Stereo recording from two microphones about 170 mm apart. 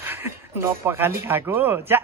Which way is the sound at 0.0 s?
15° right (ahead or behind).